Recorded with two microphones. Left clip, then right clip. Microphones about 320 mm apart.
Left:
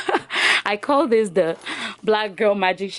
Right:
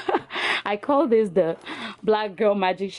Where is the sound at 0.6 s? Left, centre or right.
Centre.